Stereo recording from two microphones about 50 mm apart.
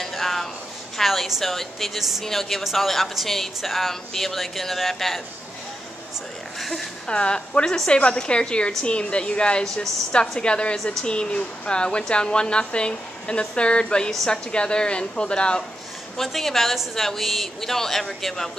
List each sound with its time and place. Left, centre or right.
0.0 s a sound: centre
0.9 s a woman's voice: centre
7.1 s a woman's voice: centre
16.2 s a woman's voice: centre